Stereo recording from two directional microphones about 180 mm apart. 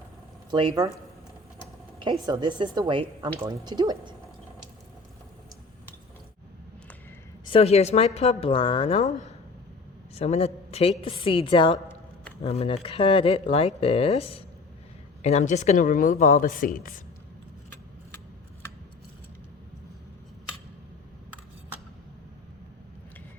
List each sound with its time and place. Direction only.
0.5 s a woman's voice: 25° right (ahead or behind)
2.2 s a woman's voice: 25° right (ahead or behind)
7.4 s speech: 30° left (ahead or behind); by 17.0 s 50° left (ahead or behind)